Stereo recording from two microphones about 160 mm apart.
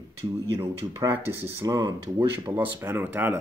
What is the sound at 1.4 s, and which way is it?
Speech, 20° right (ahead or behind).